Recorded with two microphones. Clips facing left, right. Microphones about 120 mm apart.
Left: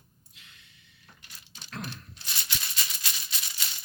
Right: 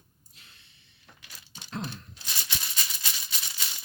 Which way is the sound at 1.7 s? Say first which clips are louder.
Right 3 dB; 25° right (ahead or behind).